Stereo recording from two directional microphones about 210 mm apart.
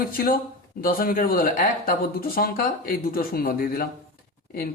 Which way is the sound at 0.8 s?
45° left (ahead or behind).